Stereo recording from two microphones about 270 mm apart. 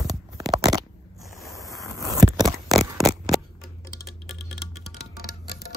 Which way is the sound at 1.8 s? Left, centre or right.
Centre.